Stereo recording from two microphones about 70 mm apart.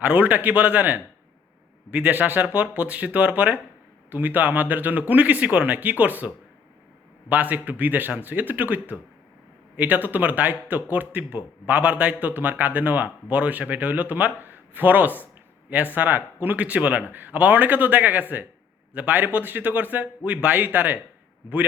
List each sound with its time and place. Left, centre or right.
0.0 s speech: right